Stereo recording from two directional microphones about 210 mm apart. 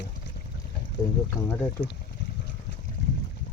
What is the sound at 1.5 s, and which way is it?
Speech, 15° left (ahead or behind).